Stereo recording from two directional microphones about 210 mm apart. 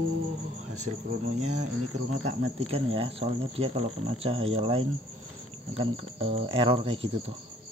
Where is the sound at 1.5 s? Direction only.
90° right.